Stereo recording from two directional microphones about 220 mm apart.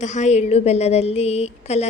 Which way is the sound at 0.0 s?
30° left (ahead or behind).